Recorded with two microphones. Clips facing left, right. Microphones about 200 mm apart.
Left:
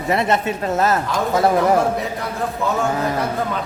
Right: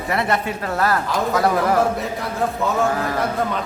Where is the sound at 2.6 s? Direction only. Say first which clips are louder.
Left 3 dB; centre (ahead or behind).